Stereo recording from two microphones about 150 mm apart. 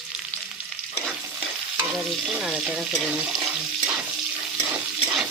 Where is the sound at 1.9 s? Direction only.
5° right (ahead or behind).